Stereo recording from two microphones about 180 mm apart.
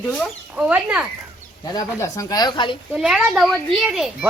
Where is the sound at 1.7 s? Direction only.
20° left (ahead or behind).